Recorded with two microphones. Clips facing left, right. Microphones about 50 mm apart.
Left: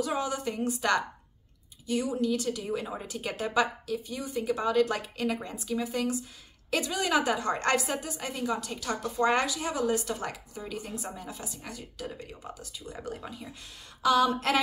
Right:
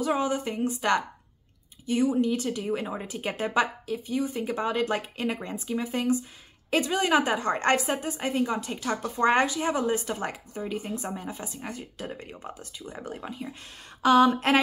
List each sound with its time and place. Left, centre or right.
0.0 s a woman's voice: right
12.9 s a woman's voice: right